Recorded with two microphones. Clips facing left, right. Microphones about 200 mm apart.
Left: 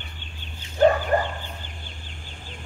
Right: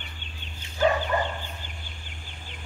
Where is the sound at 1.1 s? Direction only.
45° left (ahead or behind).